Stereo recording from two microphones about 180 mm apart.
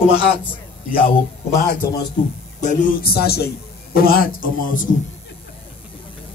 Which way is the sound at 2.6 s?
45° left (ahead or behind).